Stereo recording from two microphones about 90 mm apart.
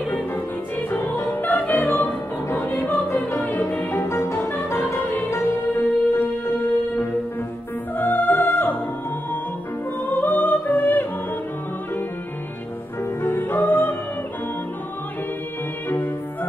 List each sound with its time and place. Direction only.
0.8 s music: 25° left (ahead or behind)
8.0 s music: 20° left (ahead or behind)
10.0 s music: 20° left (ahead or behind)
13.2 s music: 25° left (ahead or behind)